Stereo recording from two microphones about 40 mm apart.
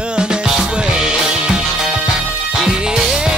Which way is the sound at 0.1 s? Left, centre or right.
Right.